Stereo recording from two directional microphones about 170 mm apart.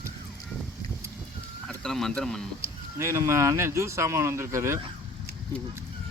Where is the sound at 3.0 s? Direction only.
15° right (ahead or behind).